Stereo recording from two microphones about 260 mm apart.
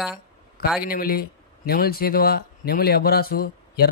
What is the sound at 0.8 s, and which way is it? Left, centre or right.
Speech, left.